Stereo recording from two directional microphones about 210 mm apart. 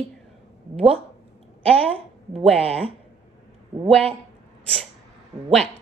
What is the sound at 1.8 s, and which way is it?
A woman's voice, 25° right (ahead or behind).